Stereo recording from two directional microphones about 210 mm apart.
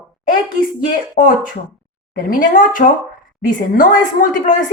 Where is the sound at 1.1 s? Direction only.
40° left (ahead or behind).